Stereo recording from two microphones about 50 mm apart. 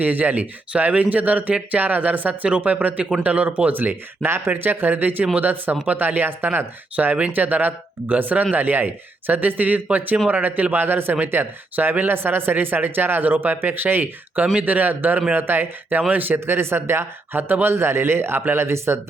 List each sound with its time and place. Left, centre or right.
0.0 s speech: right
16.5 s speech: right